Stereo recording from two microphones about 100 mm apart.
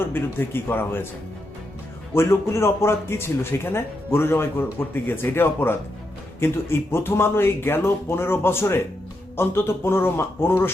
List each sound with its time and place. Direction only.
0.0 s speech: 20° left (ahead or behind)
2.1 s speech: 25° left (ahead or behind)